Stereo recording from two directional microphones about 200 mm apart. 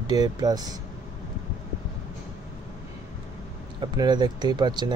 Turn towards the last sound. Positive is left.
turn(degrees=-20)  # may be behind; listen again after turning